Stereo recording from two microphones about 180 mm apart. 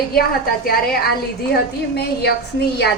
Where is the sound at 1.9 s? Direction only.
65° left (ahead or behind).